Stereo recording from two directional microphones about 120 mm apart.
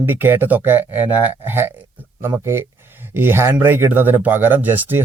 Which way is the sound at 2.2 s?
20° right (ahead or behind).